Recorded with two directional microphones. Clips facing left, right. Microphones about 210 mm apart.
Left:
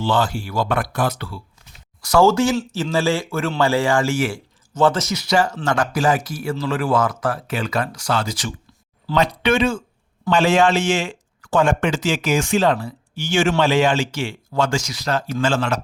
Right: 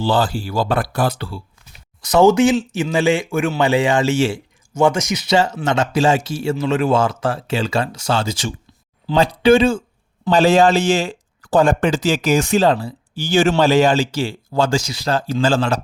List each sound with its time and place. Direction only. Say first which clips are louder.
0.0 s speech: right 2 dB; 35° right (ahead or behind)
2.0 s speech: right 3 dB; 20° right (ahead or behind)